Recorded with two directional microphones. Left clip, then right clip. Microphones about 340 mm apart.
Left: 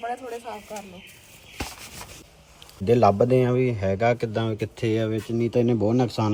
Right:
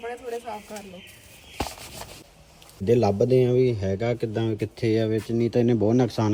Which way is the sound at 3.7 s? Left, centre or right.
Centre.